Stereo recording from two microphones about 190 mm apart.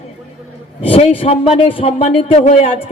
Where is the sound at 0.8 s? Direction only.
30° left (ahead or behind).